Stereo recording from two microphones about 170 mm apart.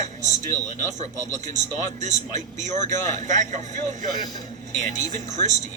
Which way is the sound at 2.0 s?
45° right (ahead or behind).